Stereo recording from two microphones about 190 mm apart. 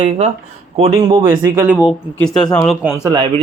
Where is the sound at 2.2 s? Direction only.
5° left (ahead or behind).